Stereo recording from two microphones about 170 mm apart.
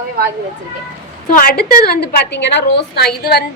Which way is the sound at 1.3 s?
60° left (ahead or behind).